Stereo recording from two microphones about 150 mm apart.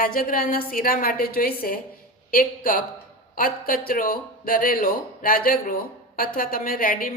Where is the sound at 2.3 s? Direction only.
70° left (ahead or behind).